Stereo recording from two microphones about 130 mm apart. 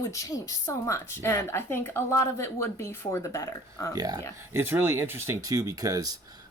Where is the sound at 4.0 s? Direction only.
30° right (ahead or behind).